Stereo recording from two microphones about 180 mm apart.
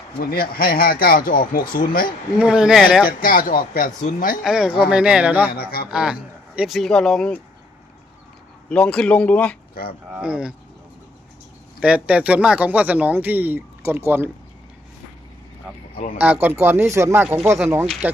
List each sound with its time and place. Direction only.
0.2 s speech: 55° left (ahead or behind)
2.4 s speech: 5° right (ahead or behind)
3.1 s speech: 50° left (ahead or behind)
4.4 s speech: 5° right (ahead or behind)
5.5 s speech: 55° left (ahead or behind)
5.9 s speech: 5° right (ahead or behind)
8.7 s speech: 5° left (ahead or behind)
9.8 s speech: 55° left (ahead or behind)
10.1 s speech: 5° right (ahead or behind)
11.8 s speech: 5° right (ahead or behind)
16.1 s speech: 10° right (ahead or behind)